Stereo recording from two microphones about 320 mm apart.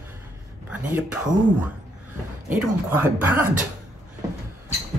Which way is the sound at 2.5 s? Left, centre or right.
Centre.